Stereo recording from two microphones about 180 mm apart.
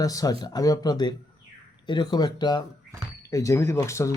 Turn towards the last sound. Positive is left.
turn(degrees=15)  # may be behind; listen again after turning